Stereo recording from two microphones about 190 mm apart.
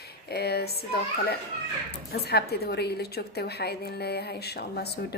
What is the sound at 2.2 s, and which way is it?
A woman's voice, 55° left (ahead or behind).